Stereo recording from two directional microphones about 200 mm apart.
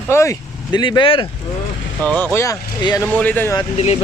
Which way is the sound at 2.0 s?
10° left (ahead or behind).